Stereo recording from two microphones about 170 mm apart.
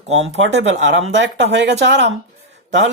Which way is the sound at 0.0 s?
90° right.